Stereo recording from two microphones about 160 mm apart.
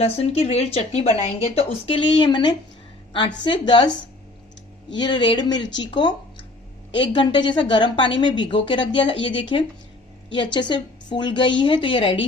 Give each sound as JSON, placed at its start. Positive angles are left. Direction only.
{"t": 0.0, "sound": "a woman's voice", "side_deg": 40}